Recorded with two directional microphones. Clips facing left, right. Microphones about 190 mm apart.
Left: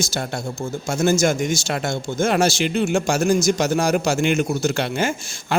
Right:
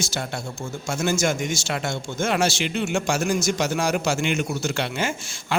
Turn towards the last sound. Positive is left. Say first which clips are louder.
# left 3 dB
turn(degrees=45)  # may be behind; listen again after turning